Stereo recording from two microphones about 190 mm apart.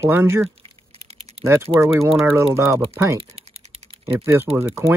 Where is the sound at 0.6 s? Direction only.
30° right (ahead or behind).